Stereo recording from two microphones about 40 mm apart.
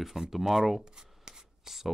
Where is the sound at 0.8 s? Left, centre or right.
Centre.